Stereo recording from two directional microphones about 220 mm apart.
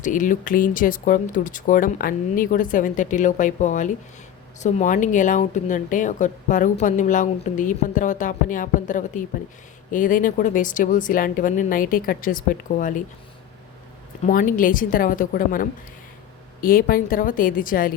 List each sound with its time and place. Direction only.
0.0 s a woman's voice: 35° left (ahead or behind)
14.3 s a woman's voice: 40° left (ahead or behind)